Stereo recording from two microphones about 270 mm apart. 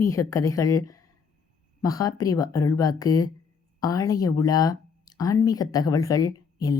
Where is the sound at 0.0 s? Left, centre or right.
Centre.